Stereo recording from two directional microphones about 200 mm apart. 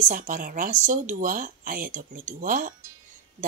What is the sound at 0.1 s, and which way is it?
A woman's voice, 45° right (ahead or behind).